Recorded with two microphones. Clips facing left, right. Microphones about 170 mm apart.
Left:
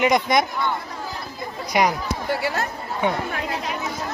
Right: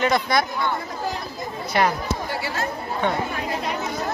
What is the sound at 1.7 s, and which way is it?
Speech, 10° left (ahead or behind).